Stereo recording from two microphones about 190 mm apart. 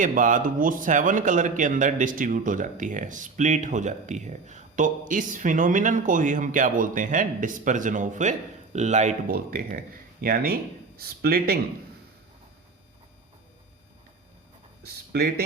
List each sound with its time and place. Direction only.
0.0 s a man's voice: 45° right (ahead or behind)
15.1 s speech: 55° right (ahead or behind)